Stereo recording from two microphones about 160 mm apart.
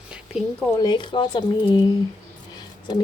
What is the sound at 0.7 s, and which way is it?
Speech, 25° left (ahead or behind).